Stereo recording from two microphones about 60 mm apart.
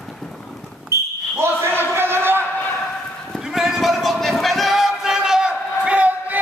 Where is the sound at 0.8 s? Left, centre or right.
Right.